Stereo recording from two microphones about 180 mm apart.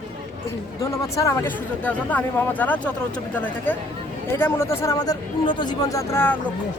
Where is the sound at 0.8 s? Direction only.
15° left (ahead or behind).